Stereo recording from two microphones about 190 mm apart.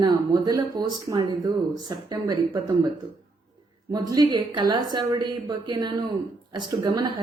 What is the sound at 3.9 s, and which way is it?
A woman's voice, 20° right (ahead or behind).